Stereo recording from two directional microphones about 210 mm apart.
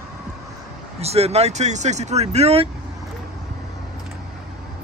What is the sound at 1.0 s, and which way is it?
Speech, 30° right (ahead or behind).